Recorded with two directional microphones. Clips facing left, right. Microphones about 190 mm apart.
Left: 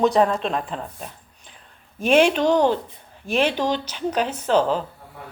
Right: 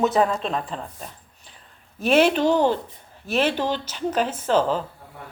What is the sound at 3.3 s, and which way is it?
Speech, 45° right (ahead or behind).